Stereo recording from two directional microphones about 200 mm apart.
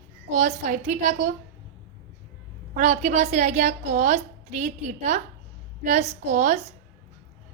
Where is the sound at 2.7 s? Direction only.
35° right (ahead or behind).